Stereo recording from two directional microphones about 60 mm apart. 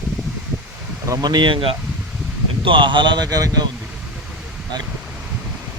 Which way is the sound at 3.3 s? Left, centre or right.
Right.